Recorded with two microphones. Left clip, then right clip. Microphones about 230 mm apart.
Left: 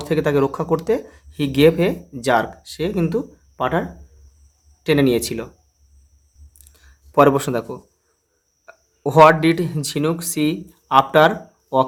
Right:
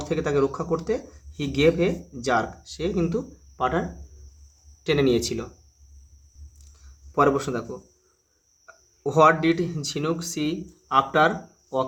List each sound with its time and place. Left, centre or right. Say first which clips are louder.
0.0 s speech: left 5 dB; left
7.1 s speech: left 7 dB; left